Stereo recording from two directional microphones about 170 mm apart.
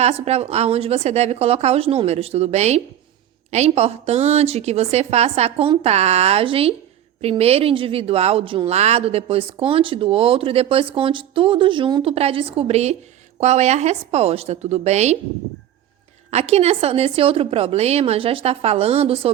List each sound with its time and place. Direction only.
0.0 s a woman's voice: 40° right (ahead or behind)
16.3 s a woman's voice: 40° right (ahead or behind)